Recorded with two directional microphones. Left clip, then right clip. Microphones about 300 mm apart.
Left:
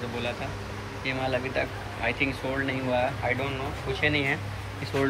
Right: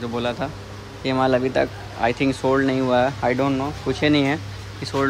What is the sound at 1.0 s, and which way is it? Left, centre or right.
Speech, right.